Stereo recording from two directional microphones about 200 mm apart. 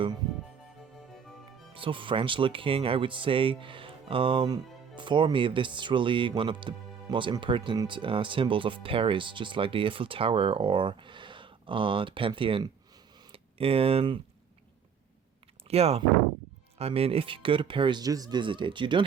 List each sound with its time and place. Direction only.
1.7 s speech: 25° right (ahead or behind)
15.6 s speech: 30° right (ahead or behind)